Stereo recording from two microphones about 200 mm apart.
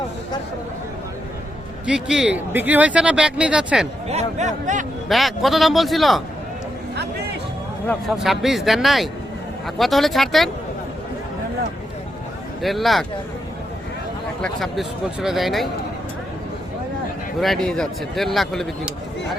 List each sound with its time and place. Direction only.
1.9 s speech: 5° right (ahead or behind)
4.1 s speech: 35° right (ahead or behind)
5.0 s speech: centre (ahead or behind)
6.9 s music: 55° right (ahead or behind)
8.1 s speech: centre (ahead or behind)
12.6 s speech: centre (ahead or behind)
14.4 s speech: centre (ahead or behind)
17.4 s speech: centre (ahead or behind)